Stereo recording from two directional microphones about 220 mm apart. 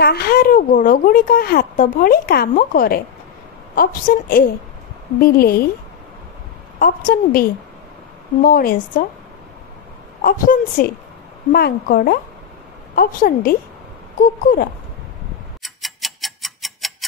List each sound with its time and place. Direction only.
0.0 s a woman's voice: 45° left (ahead or behind)
6.8 s speech: 40° left (ahead or behind)
10.2 s a woman's voice: 40° left (ahead or behind)
15.6 s tick-tock: centre (ahead or behind)